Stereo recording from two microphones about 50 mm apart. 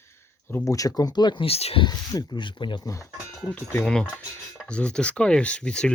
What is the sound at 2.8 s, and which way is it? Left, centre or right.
Speech, left.